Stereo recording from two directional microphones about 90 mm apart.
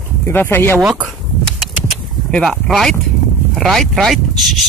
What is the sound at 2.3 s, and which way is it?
Speech, 5° left (ahead or behind).